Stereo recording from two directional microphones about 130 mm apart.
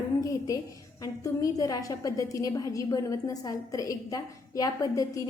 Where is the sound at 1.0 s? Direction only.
25° left (ahead or behind).